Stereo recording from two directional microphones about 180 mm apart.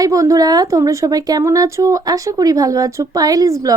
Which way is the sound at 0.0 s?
20° right (ahead or behind).